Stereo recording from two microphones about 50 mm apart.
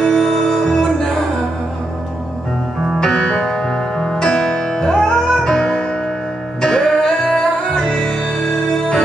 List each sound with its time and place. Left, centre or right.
0.0 s music: centre
3.0 s music: centre